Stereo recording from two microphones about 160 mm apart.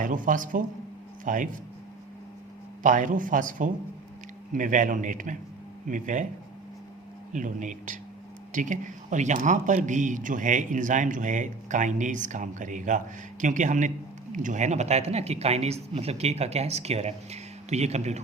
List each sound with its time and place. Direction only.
0.0 s a man's voice: 55° right (ahead or behind)
2.8 s a man's voice: 55° right (ahead or behind)
7.3 s a man's voice: 50° right (ahead or behind)